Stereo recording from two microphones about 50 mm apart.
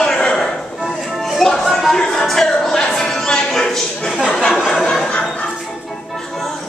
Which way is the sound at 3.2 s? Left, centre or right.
Centre.